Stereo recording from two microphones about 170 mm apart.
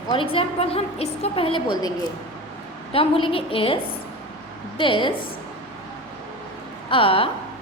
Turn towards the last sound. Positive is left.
turn(degrees=30)  # may be behind; listen again after turning